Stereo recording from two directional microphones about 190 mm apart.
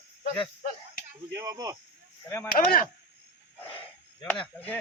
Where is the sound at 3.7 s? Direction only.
30° left (ahead or behind).